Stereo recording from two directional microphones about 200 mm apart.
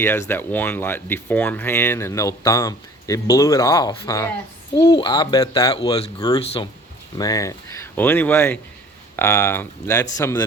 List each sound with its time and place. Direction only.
0.0 s speech: 10° left (ahead or behind)